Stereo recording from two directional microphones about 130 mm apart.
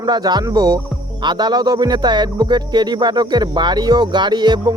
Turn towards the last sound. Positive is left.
turn(degrees=-35)  # may be behind; listen again after turning